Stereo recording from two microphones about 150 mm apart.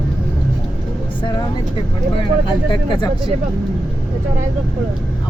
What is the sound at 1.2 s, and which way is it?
Speech, 30° left (ahead or behind).